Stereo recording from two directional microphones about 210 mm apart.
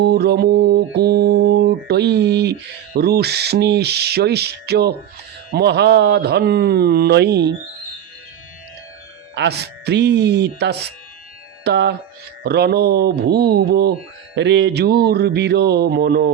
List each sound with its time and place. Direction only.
0.0 s mantra: 50° right (ahead or behind)
9.3 s mantra: 55° right (ahead or behind)
11.6 s speech: 55° right (ahead or behind)
12.4 s mantra: 50° right (ahead or behind)